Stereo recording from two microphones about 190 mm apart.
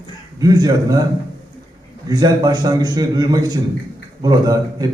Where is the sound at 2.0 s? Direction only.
20° right (ahead or behind).